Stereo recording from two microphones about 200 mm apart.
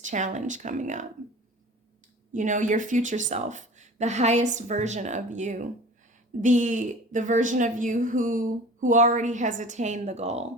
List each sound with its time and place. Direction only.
0.0 s a woman's voice: 40° right (ahead or behind)
2.3 s a woman's voice: 40° right (ahead or behind)